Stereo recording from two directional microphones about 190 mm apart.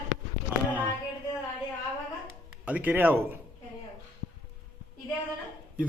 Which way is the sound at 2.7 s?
10° right (ahead or behind).